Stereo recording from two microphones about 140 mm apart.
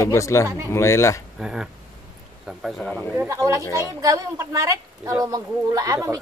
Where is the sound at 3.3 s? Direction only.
25° right (ahead or behind).